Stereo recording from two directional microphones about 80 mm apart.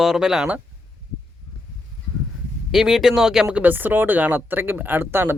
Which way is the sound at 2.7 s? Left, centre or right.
Centre.